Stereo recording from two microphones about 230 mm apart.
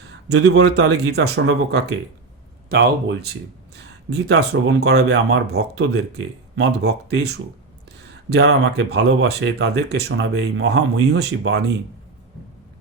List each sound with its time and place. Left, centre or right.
0.3 s speech: right